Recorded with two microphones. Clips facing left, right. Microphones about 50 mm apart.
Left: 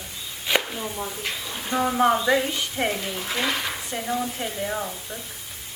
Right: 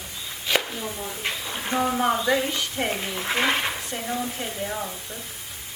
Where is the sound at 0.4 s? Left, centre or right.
Centre.